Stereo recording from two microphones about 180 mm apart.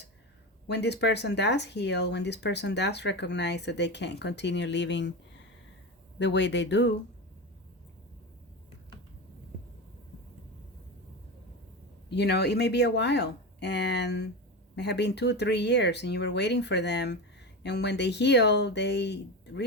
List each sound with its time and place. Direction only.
0.7 s speech: 70° left (ahead or behind)
6.1 s speech: 75° left (ahead or behind)
12.1 s speech: 65° left (ahead or behind)